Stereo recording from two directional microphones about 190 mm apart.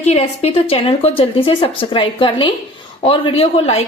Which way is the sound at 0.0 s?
35° left (ahead or behind).